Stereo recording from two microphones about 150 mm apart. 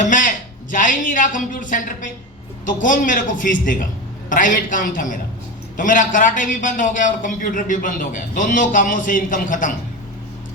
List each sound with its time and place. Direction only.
0.0 s a man's voice: 60° left (ahead or behind)